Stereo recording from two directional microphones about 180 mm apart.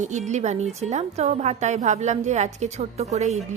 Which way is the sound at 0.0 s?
40° right (ahead or behind).